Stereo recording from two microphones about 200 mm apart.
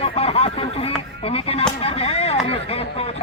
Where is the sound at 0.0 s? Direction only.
30° left (ahead or behind).